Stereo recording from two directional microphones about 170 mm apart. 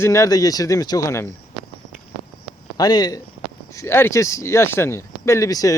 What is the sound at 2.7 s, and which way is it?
Speech, 25° left (ahead or behind).